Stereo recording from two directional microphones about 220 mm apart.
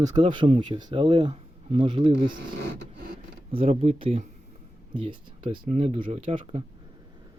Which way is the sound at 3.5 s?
25° right (ahead or behind).